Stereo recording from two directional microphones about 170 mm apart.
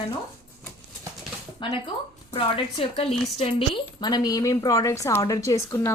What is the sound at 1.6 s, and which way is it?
A woman's voice, 25° left (ahead or behind).